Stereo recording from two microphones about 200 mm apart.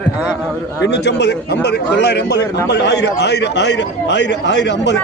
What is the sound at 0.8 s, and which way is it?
A man's voice, 60° left (ahead or behind).